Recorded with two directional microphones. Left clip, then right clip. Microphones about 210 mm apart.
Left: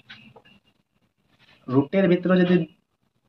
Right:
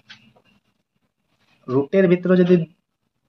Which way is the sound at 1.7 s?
35° right (ahead or behind).